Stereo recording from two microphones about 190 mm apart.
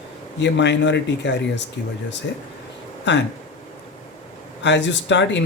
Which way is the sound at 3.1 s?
65° left (ahead or behind).